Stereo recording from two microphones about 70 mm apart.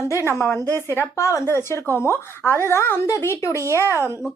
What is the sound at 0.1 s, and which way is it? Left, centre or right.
A woman's voice, left.